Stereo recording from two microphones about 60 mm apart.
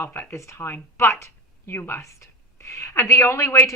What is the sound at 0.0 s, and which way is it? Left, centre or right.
A woman's voice, left.